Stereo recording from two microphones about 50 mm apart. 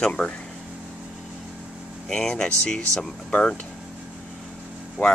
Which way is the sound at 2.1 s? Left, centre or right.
Centre.